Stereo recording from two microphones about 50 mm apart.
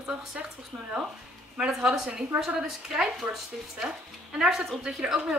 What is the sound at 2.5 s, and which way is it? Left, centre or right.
Speech, centre.